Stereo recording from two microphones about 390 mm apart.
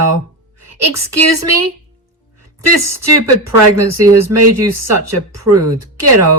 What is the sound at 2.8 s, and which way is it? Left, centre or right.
Speech, right.